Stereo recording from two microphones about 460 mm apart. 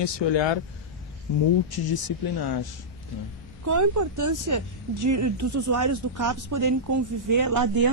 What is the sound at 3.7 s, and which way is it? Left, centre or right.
Speech, right.